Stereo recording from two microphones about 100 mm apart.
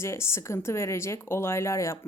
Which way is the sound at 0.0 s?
25° left (ahead or behind).